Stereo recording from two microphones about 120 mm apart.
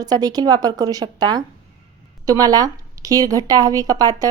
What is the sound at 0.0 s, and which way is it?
A woman's voice, 35° right (ahead or behind).